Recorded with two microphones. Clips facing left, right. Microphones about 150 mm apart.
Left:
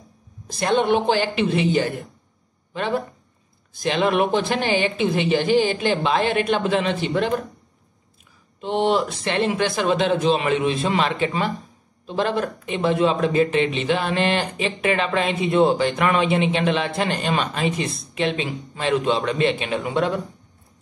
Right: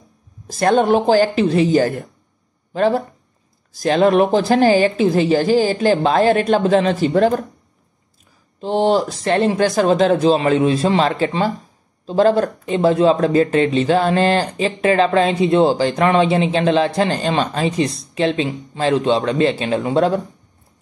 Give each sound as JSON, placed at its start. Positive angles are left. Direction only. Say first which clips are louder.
{"t": 0.5, "sound": "speech", "louder": "right 5 dB", "side_deg": -45}
{"t": 8.5, "sound": "speech", "louder": "right 4 dB", "side_deg": -35}